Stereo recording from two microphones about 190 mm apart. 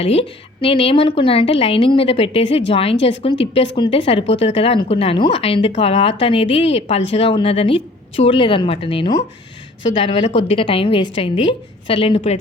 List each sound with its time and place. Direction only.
0.0 s a woman's voice: 30° left (ahead or behind)